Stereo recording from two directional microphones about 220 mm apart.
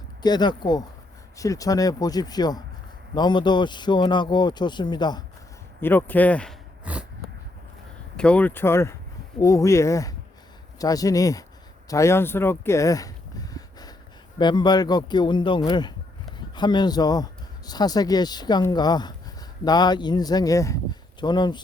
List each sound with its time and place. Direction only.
0.2 s speech: 20° left (ahead or behind)
5.8 s speech: 10° left (ahead or behind)
6.9 s a sound: 5° right (ahead or behind)
8.1 s speech: 5° left (ahead or behind)
11.9 s a sound: 15° left (ahead or behind)
14.3 s speech: 20° left (ahead or behind)